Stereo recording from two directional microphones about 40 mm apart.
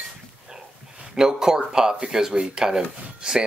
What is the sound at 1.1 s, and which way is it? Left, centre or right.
Speech, centre.